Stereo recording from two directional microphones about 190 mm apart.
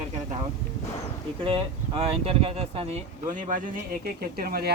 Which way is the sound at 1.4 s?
30° right (ahead or behind).